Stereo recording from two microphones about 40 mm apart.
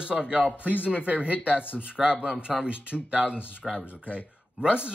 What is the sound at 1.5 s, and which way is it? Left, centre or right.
Speech, left.